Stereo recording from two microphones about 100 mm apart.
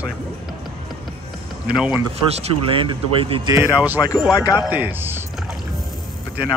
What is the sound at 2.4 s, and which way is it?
Speech, 65° right (ahead or behind).